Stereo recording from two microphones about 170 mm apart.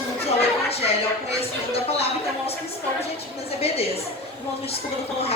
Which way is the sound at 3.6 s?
35° left (ahead or behind).